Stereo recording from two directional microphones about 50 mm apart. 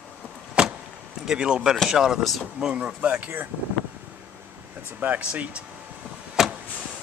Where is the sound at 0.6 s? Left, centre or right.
Centre.